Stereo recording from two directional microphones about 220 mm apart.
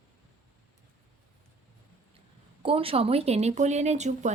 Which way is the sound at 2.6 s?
25° right (ahead or behind).